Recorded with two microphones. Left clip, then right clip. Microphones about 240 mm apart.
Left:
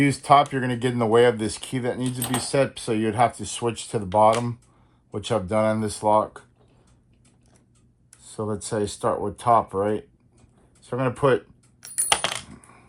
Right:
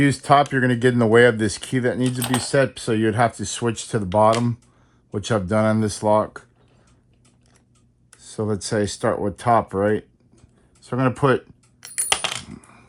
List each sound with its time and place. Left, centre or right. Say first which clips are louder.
0.0 s speech: right 1 dB; right
2.0 s speech: right 4 dB; centre
2.7 s speech: right 2 dB; right
8.4 s speech: right 4 dB; right
11.9 s coin: right 1 dB; centre